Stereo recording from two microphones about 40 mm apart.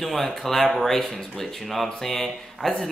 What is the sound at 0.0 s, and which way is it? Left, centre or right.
A man's voice, centre.